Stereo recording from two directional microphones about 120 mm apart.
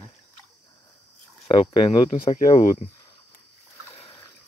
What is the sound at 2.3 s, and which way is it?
Speech, 85° left.